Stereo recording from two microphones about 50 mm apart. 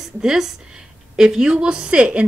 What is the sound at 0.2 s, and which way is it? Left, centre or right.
A woman's voice, centre.